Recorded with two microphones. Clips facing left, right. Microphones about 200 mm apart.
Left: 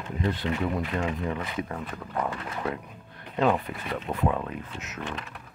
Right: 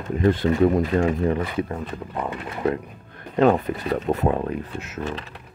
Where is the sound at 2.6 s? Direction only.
50° right (ahead or behind).